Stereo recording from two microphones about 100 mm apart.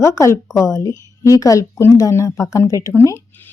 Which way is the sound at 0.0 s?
30° left (ahead or behind).